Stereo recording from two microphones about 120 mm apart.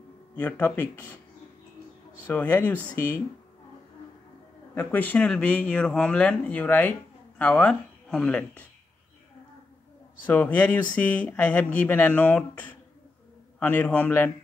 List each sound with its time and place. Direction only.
0.4 s speech: 15° left (ahead or behind)
2.2 s speech: 15° left (ahead or behind)
4.7 s speech: 15° left (ahead or behind)
10.2 s speech: 15° left (ahead or behind)